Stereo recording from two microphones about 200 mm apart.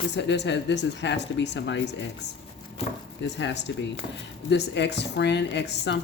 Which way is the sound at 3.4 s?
60° left (ahead or behind).